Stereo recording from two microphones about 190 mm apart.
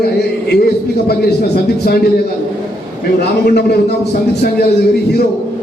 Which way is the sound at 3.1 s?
55° left (ahead or behind).